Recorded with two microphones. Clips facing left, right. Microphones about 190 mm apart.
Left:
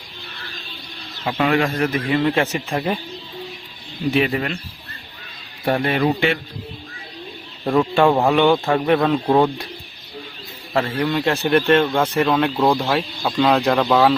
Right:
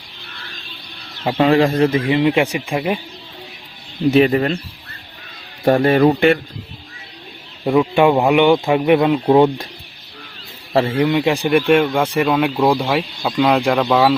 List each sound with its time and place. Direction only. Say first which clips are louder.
1.2 s a man's voice: right 5 dB; 30° right (ahead or behind); by 2.7 s 15° right (ahead or behind)
4.1 s speech: right 6 dB; 40° right (ahead or behind)
5.6 s speech: right 6 dB; 40° right (ahead or behind)
6.0 s a man's voice: right 6 dB; 55° right (ahead or behind)
7.6 s speech: right 2 dB; 10° right (ahead or behind)
10.8 s a man's voice: right 5 dB; 25° right (ahead or behind)
11.0 s speech: right 4 dB; 15° right (ahead or behind)